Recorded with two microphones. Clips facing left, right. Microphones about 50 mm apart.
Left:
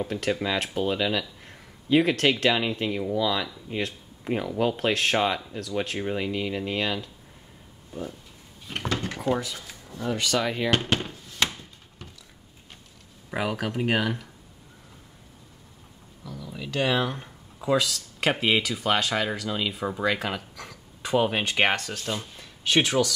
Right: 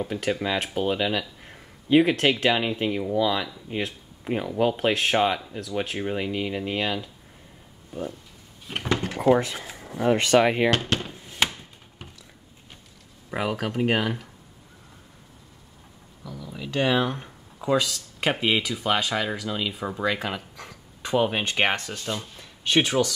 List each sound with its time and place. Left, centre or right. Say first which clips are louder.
0.0 s speech: right 1 dB; centre
8.8 s speech: right 3 dB; right
9.2 s speech: right 10 dB; right
10.7 s speech: even; centre
11.3 s a sound: right 2 dB; centre
13.3 s speech: right 1 dB; centre
16.3 s speech: right 1 dB; centre